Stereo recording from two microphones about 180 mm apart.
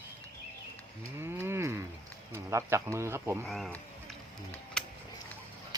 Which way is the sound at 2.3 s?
15° right (ahead or behind).